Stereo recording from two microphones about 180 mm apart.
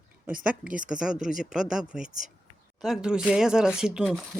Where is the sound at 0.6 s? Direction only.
50° right (ahead or behind).